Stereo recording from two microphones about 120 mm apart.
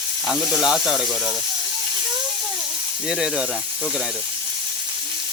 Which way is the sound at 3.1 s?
5° right (ahead or behind).